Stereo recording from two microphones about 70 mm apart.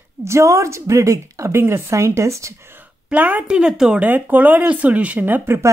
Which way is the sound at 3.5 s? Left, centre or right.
Centre.